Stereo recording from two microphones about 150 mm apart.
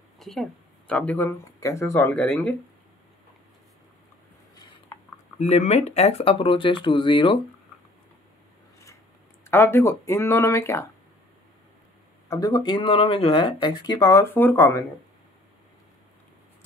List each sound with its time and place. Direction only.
0.2 s speech: centre (ahead or behind)
5.4 s speech: 50° left (ahead or behind); by 7.3 s 35° left (ahead or behind)
9.5 s speech: 15° left (ahead or behind)
12.3 s speech: 25° left (ahead or behind)